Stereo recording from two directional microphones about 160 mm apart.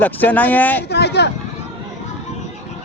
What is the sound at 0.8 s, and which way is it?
Speech, 90° left.